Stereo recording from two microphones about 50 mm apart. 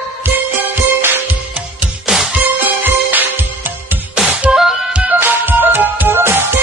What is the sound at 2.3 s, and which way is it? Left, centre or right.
Music, right.